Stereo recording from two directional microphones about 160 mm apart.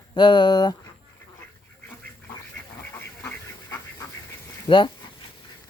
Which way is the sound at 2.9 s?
15° left (ahead or behind).